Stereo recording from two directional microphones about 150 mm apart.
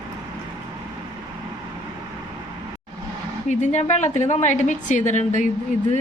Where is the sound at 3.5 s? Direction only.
50° left (ahead or behind).